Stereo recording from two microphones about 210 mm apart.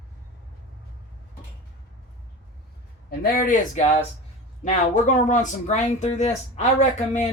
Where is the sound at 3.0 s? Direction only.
45° left (ahead or behind).